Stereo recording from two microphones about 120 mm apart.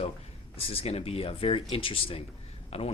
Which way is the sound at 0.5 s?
55° left (ahead or behind).